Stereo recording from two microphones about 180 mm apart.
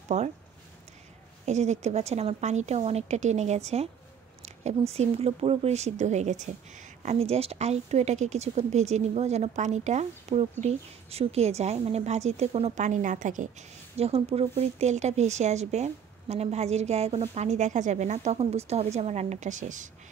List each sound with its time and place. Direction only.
0.1 s speech: 40° right (ahead or behind)
1.4 s speech: 40° right (ahead or behind)